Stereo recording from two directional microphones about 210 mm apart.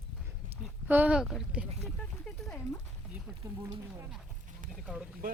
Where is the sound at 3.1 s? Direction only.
10° right (ahead or behind).